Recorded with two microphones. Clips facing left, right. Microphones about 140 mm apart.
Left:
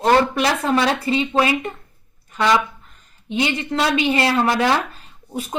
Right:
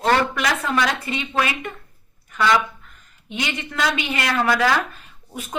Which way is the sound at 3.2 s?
30° left (ahead or behind).